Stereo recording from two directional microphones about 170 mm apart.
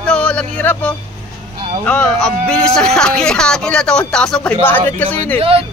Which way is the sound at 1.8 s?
5° left (ahead or behind).